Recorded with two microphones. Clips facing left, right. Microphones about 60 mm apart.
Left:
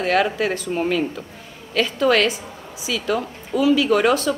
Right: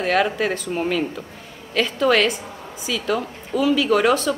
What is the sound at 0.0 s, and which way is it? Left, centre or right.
Speech, centre.